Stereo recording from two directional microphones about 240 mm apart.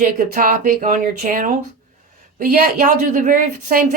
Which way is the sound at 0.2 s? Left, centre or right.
Right.